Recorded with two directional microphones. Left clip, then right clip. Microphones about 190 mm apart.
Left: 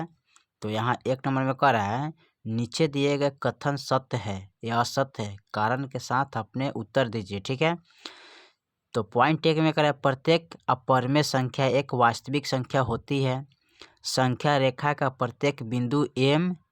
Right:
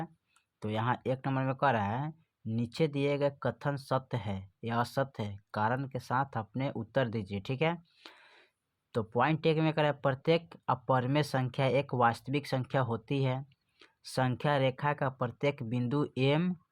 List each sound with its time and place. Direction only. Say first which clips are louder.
0.6 s speech: left 5 dB; 25° left (ahead or behind)